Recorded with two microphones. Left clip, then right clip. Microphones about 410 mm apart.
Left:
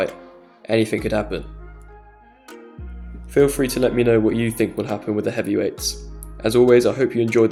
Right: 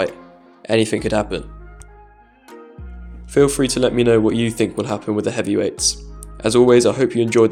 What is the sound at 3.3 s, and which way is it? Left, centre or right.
Speech, left.